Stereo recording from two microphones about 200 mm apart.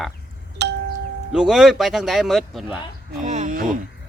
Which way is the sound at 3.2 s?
35° right (ahead or behind).